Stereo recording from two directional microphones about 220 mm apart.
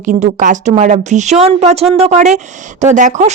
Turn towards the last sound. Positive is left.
turn(degrees=-35)  # may be behind; listen again after turning